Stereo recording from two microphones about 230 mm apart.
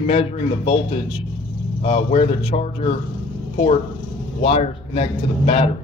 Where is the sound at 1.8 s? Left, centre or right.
Left.